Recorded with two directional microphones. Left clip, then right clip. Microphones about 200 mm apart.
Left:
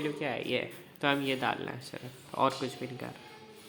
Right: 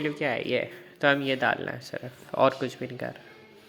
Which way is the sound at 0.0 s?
20° right (ahead or behind).